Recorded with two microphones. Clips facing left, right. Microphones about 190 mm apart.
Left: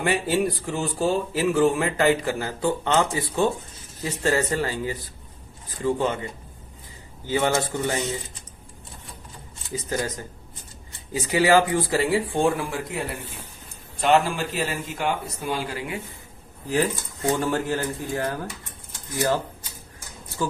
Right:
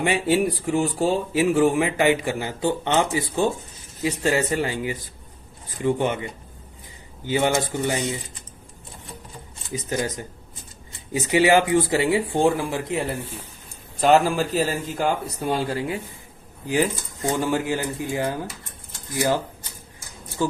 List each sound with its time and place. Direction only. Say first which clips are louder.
0.0 s speech: right 2 dB; 15° right (ahead or behind)
7.3 s speech: right 1 dB; 15° right (ahead or behind)
9.6 s speech: right 1 dB; 20° right (ahead or behind)
14.0 s speech: right 3 dB; 40° right (ahead or behind)
17.3 s speech: right 3 dB; 15° right (ahead or behind)